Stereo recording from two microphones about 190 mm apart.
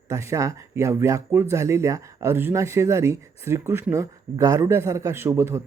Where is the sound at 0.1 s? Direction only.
15° right (ahead or behind).